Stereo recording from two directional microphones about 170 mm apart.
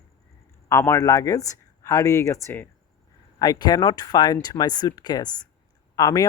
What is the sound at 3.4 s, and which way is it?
Speech, 25° left (ahead or behind).